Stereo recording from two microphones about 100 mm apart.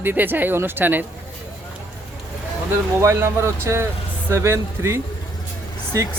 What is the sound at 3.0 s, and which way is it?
Speech, 30° right (ahead or behind).